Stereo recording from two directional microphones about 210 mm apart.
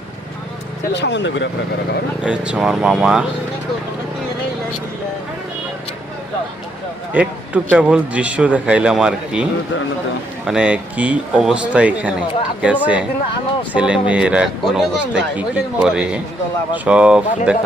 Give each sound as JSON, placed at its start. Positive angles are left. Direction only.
{"t": 0.9, "sound": "speech", "side_deg": 55}
{"t": 2.2, "sound": "speech", "side_deg": -5}
{"t": 7.1, "sound": "speech", "side_deg": -5}